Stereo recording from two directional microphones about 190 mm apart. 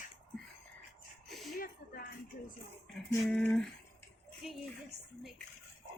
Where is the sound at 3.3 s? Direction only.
5° left (ahead or behind).